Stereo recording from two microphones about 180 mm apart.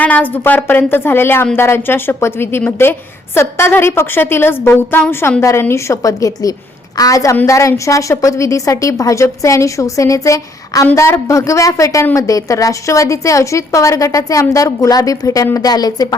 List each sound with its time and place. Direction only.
0.0 s a woman's voice: 10° left (ahead or behind)